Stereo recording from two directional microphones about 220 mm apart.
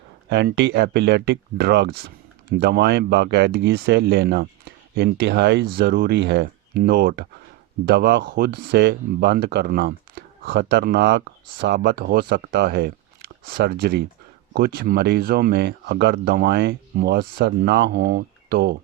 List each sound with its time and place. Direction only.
0.3 s speech: 50° right (ahead or behind)